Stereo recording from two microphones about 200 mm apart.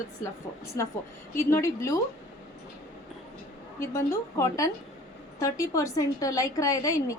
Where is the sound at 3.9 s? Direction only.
15° left (ahead or behind).